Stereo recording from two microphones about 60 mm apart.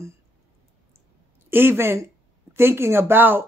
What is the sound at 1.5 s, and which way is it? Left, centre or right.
Speech, right.